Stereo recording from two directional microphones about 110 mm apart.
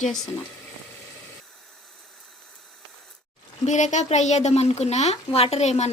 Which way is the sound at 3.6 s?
90° left.